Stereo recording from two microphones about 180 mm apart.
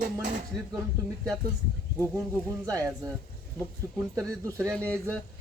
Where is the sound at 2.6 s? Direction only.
20° right (ahead or behind).